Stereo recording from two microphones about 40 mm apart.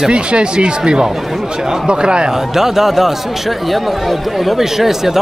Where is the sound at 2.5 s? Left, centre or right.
Centre.